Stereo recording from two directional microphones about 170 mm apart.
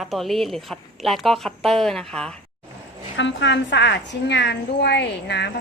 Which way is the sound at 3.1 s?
90° left.